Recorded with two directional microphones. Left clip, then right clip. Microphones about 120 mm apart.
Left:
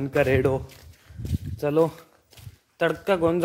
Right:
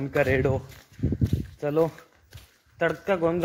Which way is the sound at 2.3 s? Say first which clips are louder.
Even; 5° left (ahead or behind).